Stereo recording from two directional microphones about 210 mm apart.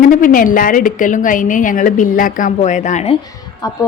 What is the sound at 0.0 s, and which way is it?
A woman's voice, 40° left (ahead or behind).